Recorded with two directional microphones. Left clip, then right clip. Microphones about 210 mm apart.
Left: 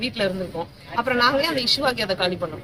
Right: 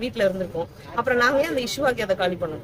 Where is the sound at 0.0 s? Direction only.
5° right (ahead or behind).